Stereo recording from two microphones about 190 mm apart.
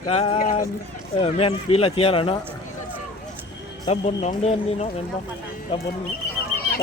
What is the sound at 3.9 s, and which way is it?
Speech, 35° left (ahead or behind).